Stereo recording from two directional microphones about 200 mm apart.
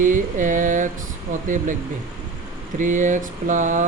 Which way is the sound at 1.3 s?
40° right (ahead or behind).